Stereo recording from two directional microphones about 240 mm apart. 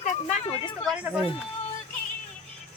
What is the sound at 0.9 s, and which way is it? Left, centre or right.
Speech, centre.